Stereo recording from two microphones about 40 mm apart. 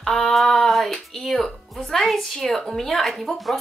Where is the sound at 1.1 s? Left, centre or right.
Centre.